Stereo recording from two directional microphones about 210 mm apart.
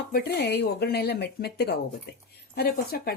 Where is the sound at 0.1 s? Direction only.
50° left (ahead or behind).